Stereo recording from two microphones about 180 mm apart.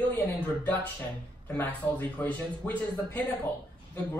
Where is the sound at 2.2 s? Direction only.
10° left (ahead or behind).